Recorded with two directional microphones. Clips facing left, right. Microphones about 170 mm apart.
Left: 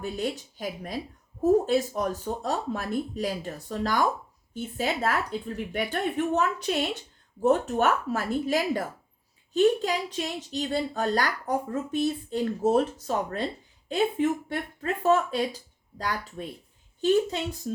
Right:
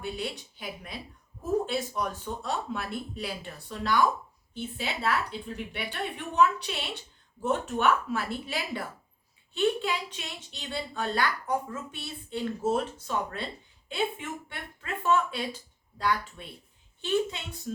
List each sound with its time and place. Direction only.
0.0 s a woman's voice: 40° left (ahead or behind)